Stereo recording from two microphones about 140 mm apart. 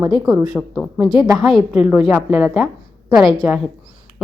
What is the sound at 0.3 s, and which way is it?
A woman's voice, 5° right (ahead or behind).